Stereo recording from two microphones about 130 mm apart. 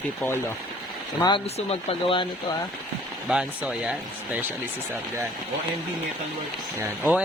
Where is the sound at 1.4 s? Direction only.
50° left (ahead or behind).